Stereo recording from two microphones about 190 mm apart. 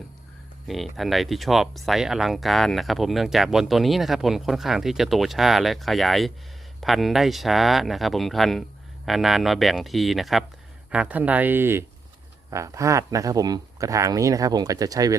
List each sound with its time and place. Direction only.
0.7 s speech: centre (ahead or behind); by 15.1 s 20° right (ahead or behind)